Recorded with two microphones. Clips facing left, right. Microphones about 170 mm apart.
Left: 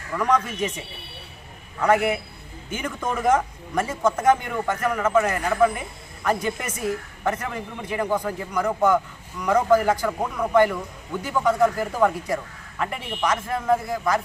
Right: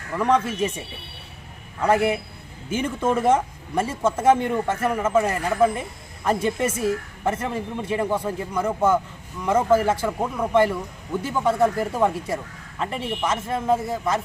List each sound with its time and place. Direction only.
0.2 s speech: 30° right (ahead or behind)
1.8 s speech: 30° right (ahead or behind)